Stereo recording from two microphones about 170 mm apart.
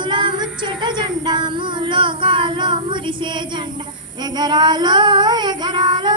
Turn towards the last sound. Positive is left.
turn(degrees=-25)  # may be behind; listen again after turning